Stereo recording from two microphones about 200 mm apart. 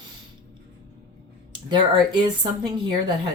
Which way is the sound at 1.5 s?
25° right (ahead or behind).